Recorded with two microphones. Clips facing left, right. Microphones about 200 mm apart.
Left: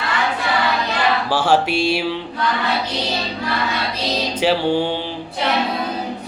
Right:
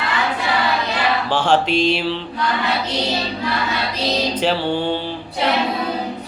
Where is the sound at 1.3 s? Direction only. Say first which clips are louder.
Right 1 dB; 10° left (ahead or behind).